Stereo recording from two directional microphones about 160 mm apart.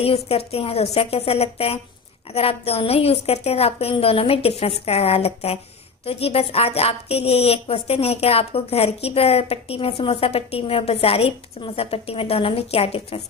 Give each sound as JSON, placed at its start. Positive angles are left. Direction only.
{"t": 0.0, "sound": "a woman's voice", "side_deg": 40}